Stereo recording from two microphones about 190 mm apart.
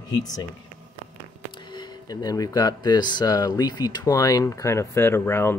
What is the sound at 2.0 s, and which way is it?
Speech, 20° left (ahead or behind).